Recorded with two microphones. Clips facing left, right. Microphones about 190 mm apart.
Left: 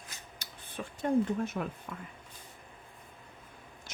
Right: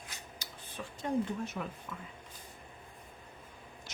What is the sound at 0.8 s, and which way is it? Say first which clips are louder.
Speech: left 5 dB; 55° left (ahead or behind).